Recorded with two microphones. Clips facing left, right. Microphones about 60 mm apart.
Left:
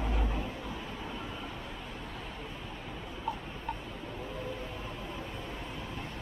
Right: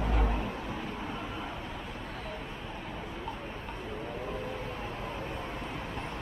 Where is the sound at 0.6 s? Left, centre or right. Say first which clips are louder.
Right 3 dB; right.